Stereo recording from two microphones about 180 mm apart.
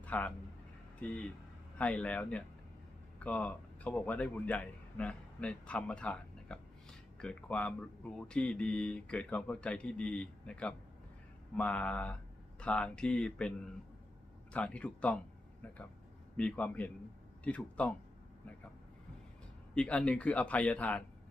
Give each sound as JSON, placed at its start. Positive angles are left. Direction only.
{"t": 0.0, "sound": "a man's voice", "side_deg": 10}
{"t": 14.5, "sound": "speech", "side_deg": 5}
{"t": 16.4, "sound": "speech", "side_deg": 5}
{"t": 19.7, "sound": "speech", "side_deg": 5}